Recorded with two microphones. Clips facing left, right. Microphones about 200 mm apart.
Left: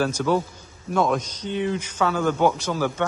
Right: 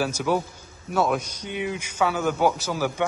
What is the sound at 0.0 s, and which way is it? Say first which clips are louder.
Speech: left 2 dB; 10° right (ahead or behind).